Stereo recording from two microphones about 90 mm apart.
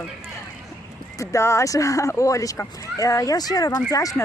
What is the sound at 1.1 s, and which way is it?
Speech, 35° left (ahead or behind).